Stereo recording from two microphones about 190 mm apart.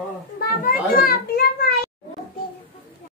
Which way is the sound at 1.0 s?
50° left (ahead or behind).